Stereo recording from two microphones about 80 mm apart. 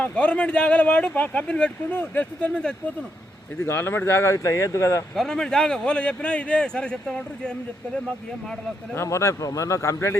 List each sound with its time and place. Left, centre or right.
0.0 s speech: centre
2.5 s a man's voice: centre
3.6 s speech: left
5.1 s a man's voice: centre
9.0 s speech: left